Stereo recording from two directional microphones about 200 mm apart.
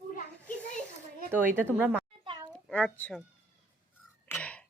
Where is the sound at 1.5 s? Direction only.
10° right (ahead or behind).